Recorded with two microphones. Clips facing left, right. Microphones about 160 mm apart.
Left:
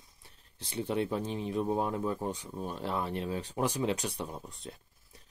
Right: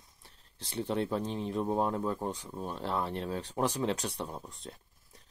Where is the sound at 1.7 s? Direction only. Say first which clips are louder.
Right 3 dB; 35° right (ahead or behind).